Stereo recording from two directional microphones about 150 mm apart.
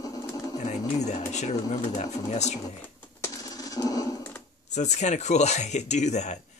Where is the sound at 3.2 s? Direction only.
25° left (ahead or behind).